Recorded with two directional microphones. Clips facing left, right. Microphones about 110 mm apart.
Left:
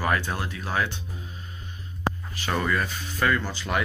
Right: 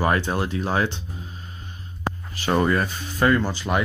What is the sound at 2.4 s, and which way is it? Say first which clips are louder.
Speech: right 6 dB; 30° right (ahead or behind).